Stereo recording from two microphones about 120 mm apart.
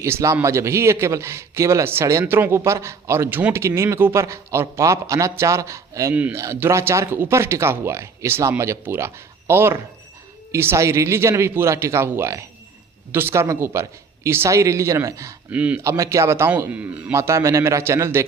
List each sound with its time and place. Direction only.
0.0 s speech: 25° right (ahead or behind)
15.5 s speech: 10° right (ahead or behind)
15.8 s speech: 25° right (ahead or behind)
17.2 s speech: 25° right (ahead or behind)